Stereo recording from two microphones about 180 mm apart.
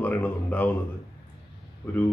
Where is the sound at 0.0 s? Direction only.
10° left (ahead or behind).